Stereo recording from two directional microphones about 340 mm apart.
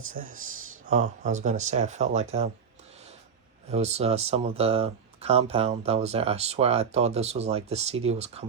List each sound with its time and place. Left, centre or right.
0.1 s speech: right
3.7 s speech: centre